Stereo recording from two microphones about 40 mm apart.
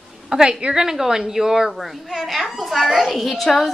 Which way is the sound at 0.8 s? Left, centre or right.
Centre.